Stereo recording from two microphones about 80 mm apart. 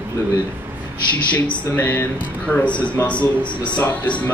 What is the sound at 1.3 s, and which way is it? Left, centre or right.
A man's voice, left.